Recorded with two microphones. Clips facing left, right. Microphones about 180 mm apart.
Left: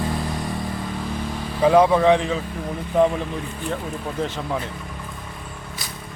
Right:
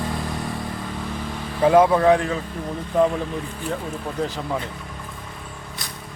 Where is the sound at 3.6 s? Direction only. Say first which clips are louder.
Left 1 dB; centre (ahead or behind).